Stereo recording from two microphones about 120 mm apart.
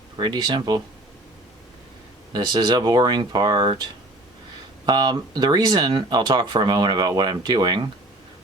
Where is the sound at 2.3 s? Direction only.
40° right (ahead or behind).